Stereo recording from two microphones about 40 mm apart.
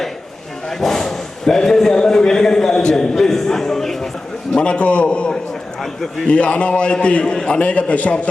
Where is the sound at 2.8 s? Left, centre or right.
Centre.